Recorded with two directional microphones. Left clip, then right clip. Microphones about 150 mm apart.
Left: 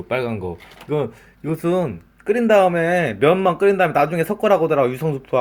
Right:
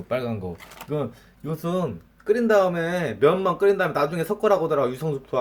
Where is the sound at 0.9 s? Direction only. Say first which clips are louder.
Left 6 dB; 20° left (ahead or behind).